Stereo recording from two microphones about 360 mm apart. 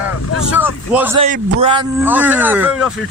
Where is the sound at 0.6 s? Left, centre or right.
Centre.